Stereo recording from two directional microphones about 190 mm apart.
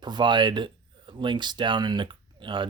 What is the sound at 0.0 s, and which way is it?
Speech, 25° right (ahead or behind).